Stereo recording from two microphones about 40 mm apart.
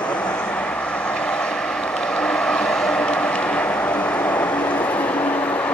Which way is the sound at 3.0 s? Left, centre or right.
Left.